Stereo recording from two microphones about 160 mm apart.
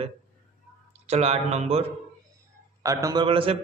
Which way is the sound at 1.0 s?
40° right (ahead or behind).